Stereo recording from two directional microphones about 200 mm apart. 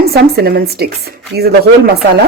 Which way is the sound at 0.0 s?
50° right (ahead or behind).